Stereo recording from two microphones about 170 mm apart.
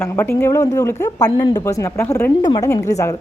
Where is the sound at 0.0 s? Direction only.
15° left (ahead or behind).